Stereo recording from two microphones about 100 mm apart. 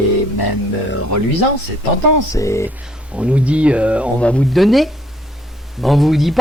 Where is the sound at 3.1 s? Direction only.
10° right (ahead or behind).